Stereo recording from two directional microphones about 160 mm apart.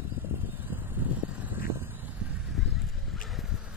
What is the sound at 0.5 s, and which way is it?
Vehicle, 10° right (ahead or behind).